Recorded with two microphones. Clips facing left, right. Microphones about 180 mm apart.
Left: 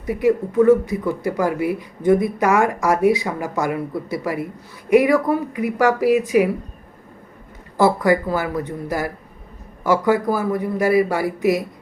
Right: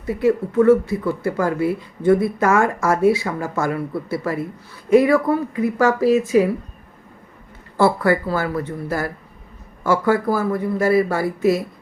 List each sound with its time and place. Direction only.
0.0 s speech: 15° left (ahead or behind)
7.8 s speech: 15° left (ahead or behind)